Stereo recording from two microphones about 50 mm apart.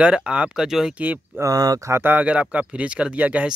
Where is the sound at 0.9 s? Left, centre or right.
Right.